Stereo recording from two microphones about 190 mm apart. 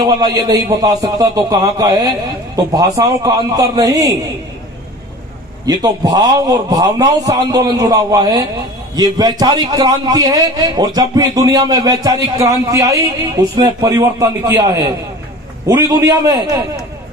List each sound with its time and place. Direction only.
0.0 s a man's voice: 15° right (ahead or behind)
5.7 s a man's voice: 20° right (ahead or behind)